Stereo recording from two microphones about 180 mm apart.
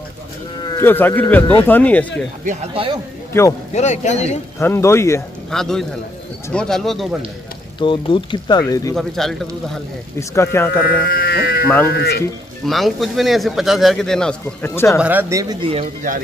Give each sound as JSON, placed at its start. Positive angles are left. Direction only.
{"t": 0.7, "sound": "speech", "side_deg": 15}
{"t": 2.4, "sound": "speech", "side_deg": -35}
{"t": 3.3, "sound": "speech", "side_deg": 15}
{"t": 3.7, "sound": "speech", "side_deg": 40}
{"t": 4.6, "sound": "speech", "side_deg": 15}
{"t": 5.5, "sound": "speech", "side_deg": 0}
{"t": 7.8, "sound": "speech", "side_deg": 30}
{"t": 8.9, "sound": "speech", "side_deg": 0}
{"t": 10.1, "sound": "speech", "side_deg": 15}
{"t": 11.1, "sound": "speech", "side_deg": 60}
{"t": 12.6, "sound": "speech", "side_deg": 0}
{"t": 15.0, "sound": "speech", "side_deg": -10}
{"t": 15.6, "sound": "speech", "side_deg": -35}